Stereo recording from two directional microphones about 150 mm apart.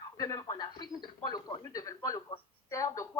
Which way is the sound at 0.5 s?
30° left (ahead or behind).